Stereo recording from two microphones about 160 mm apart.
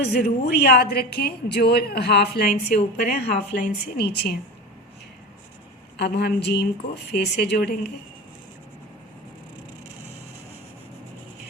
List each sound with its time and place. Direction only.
0.0 s a woman's voice: 85° left
6.0 s speech: 90° left